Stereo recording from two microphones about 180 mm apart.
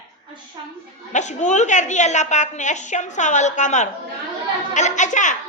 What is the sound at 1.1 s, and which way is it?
A woman's voice, 40° left (ahead or behind).